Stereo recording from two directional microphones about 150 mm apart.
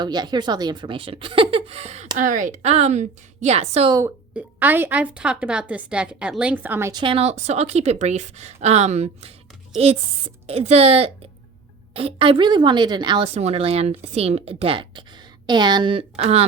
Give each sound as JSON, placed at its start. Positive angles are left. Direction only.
{"t": 0.0, "sound": "a woman's voice", "side_deg": -30}
{"t": 2.1, "sound": "a woman's voice", "side_deg": -60}
{"t": 4.4, "sound": "a woman's voice", "side_deg": -10}
{"t": 6.9, "sound": "a woman's voice", "side_deg": -35}